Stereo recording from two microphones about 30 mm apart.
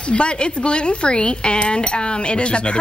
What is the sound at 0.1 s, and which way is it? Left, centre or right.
Speech, left.